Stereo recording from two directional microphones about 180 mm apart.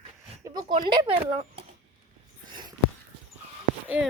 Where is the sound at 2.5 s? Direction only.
25° right (ahead or behind).